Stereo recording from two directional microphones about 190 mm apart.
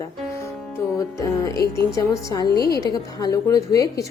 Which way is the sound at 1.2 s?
15° left (ahead or behind).